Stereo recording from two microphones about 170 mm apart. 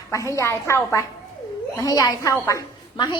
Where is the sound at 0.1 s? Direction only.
20° left (ahead or behind).